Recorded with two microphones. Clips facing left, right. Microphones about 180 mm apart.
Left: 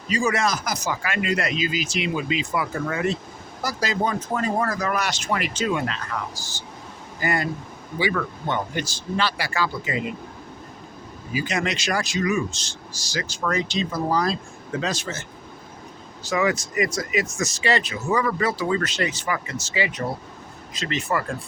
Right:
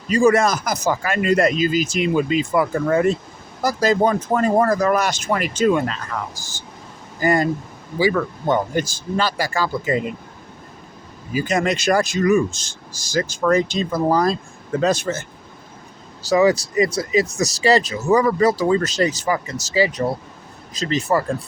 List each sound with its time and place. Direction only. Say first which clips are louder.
0.1 s speech: right 8 dB; 55° right (ahead or behind)
8.4 s speech: right 10 dB; 40° right (ahead or behind)
11.3 s speech: right 6 dB; 50° right (ahead or behind)
16.2 s speech: right 7 dB; 35° right (ahead or behind)